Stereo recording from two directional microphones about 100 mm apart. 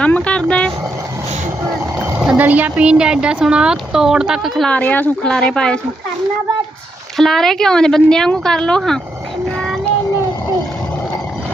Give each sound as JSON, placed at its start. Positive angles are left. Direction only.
{"t": 0.0, "sound": "speech", "side_deg": 10}
{"t": 2.1, "sound": "speech", "side_deg": -15}
{"t": 4.7, "sound": "speech", "side_deg": 15}
{"t": 7.2, "sound": "speech", "side_deg": 5}
{"t": 9.6, "sound": "child singing", "side_deg": 0}